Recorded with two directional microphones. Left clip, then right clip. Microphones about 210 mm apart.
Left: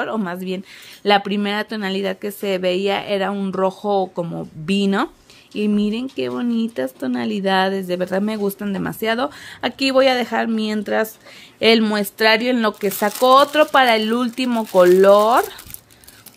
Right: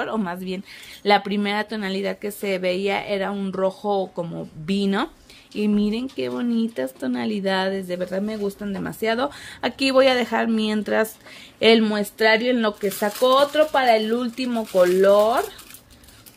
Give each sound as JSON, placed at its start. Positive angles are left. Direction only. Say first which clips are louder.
{"t": 0.0, "sound": "speech", "louder": "left 3 dB", "side_deg": 10}